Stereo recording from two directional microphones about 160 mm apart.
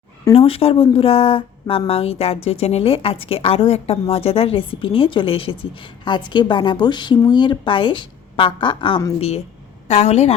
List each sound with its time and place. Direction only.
0.3 s speech: 40° left (ahead or behind)
9.9 s speech: 40° left (ahead or behind)